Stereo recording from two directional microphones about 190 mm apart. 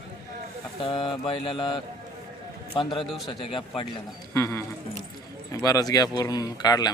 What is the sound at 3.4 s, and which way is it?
Speech, 30° left (ahead or behind).